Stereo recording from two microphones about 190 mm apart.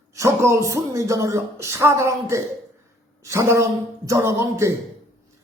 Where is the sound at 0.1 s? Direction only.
15° right (ahead or behind).